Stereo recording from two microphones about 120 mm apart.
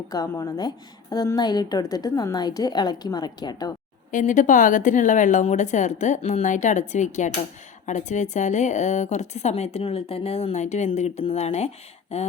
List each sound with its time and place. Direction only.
0.1 s a woman's voice: 30° left (ahead or behind)
4.1 s a woman's voice: 90° left; by 11.7 s 65° left (ahead or behind)